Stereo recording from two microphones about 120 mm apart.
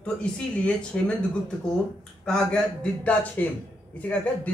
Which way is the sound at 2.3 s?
10° left (ahead or behind).